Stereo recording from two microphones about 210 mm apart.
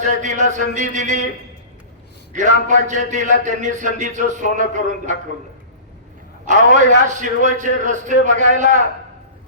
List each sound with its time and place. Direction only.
0.0 s a man's voice: 35° right (ahead or behind)
2.3 s a man's voice: 35° right (ahead or behind)
6.4 s a man's voice: 35° right (ahead or behind)